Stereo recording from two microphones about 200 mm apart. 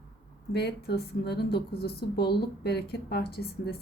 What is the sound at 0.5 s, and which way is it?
A woman's voice, 55° left (ahead or behind).